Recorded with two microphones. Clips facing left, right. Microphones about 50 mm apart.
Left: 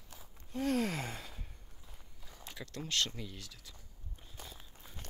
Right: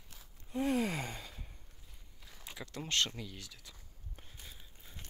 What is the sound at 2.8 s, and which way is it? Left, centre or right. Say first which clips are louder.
Speech: right 2 dB; right.